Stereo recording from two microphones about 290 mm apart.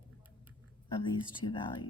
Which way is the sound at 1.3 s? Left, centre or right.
Centre.